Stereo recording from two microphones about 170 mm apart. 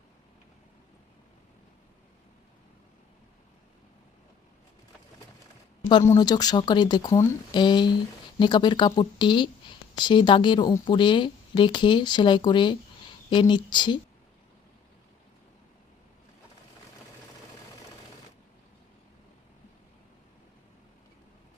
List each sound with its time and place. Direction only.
6.1 s speech: 25° left (ahead or behind)